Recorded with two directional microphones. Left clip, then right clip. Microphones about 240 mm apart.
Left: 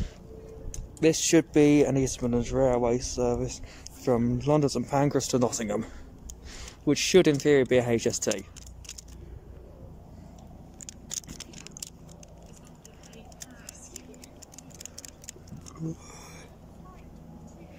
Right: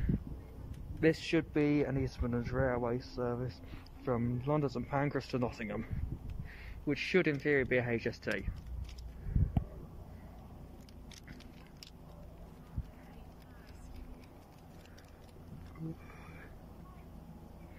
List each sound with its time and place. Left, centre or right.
1.0 s speech: centre